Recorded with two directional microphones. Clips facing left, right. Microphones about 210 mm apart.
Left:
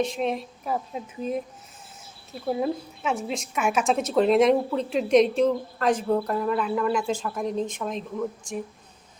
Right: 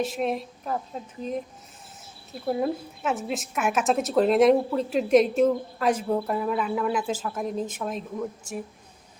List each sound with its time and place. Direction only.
0.0 s a woman's voice: 5° right (ahead or behind)
2.5 s a woman's voice: centre (ahead or behind)